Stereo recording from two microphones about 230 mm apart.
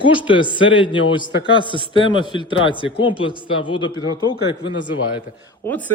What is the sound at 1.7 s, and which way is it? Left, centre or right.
Speech, left.